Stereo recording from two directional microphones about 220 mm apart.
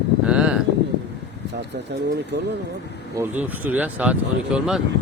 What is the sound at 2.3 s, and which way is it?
Speech, 50° right (ahead or behind).